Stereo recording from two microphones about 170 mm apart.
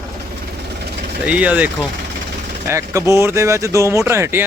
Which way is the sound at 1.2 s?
10° right (ahead or behind).